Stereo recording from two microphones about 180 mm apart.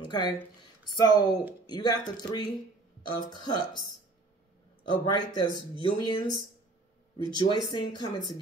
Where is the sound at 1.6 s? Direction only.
25° left (ahead or behind).